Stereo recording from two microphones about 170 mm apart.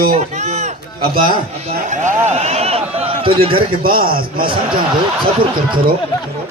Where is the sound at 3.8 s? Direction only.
60° right (ahead or behind).